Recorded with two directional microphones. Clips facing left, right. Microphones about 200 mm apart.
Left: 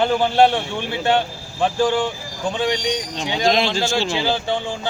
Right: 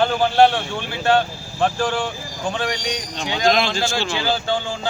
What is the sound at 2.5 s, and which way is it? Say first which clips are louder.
Speech: left 4 dB; 20° left (ahead or behind).